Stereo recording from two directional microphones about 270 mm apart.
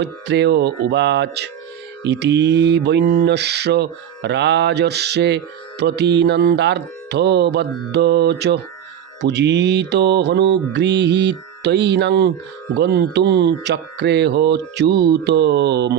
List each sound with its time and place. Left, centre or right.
0.0 s mantra: right